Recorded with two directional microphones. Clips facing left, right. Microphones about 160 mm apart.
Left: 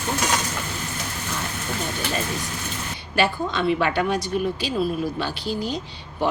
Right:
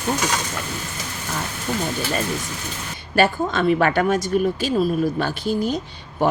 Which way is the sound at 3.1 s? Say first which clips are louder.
Right 4 dB; 45° right (ahead or behind).